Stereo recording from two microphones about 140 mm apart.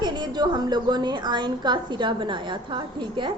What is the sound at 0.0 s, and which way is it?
A woman's voice, 30° right (ahead or behind).